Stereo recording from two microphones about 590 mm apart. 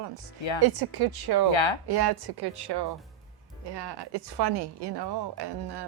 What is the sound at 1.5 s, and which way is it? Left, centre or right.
Speech, left.